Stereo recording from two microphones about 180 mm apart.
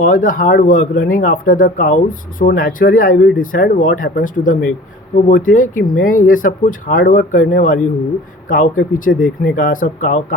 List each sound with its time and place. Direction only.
0.0 s speech: 50° left (ahead or behind)